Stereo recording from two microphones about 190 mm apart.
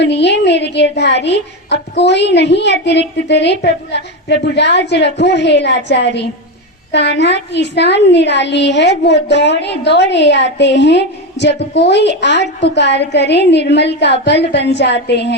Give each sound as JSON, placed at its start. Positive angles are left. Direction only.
{"t": 0.0, "sound": "a woman's voice", "side_deg": 65}